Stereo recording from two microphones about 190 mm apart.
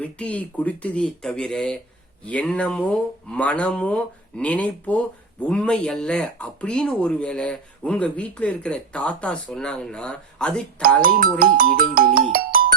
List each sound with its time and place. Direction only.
0.0 s speech: 5° left (ahead or behind)
11.0 s speech: 50° right (ahead or behind)